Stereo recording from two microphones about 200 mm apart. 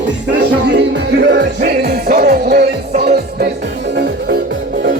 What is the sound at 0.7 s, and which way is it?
Music, 60° right (ahead or behind).